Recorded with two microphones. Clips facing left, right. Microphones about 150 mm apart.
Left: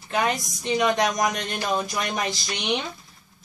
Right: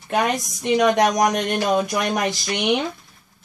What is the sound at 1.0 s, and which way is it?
Speech, 70° right (ahead or behind).